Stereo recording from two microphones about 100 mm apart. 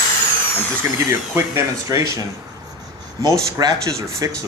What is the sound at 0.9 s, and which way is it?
Speech, 25° right (ahead or behind).